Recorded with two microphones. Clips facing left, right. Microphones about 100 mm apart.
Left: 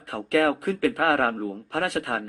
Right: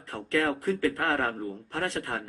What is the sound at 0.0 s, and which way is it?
A man's voice, 90° left.